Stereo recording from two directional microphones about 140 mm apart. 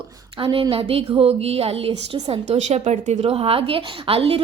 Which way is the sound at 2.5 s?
55° right (ahead or behind).